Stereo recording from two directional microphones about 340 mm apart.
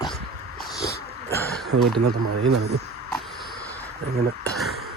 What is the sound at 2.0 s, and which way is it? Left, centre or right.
Speech, right.